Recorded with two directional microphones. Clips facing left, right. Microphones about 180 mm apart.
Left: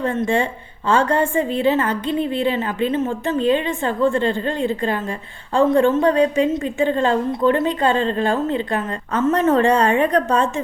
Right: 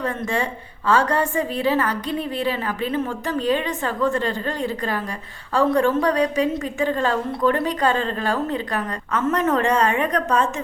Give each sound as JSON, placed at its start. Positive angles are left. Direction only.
{"t": 0.9, "sound": "a woman's voice", "side_deg": 25}